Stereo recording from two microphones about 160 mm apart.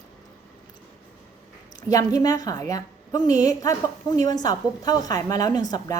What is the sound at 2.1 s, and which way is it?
A woman's voice, 25° left (ahead or behind).